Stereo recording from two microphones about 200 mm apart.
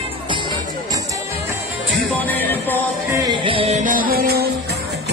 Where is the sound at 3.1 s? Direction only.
20° right (ahead or behind); by 4.5 s 50° right (ahead or behind).